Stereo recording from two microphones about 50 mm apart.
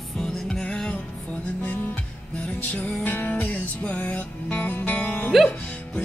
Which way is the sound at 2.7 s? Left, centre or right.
Left.